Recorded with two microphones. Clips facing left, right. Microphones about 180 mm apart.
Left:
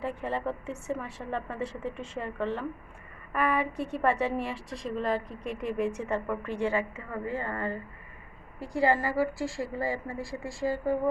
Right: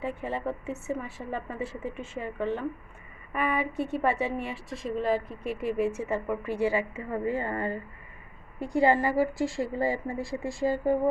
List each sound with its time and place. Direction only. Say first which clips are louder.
0.0 s a woman's voice: even; centre (ahead or behind); by 10.9 s 25° right (ahead or behind)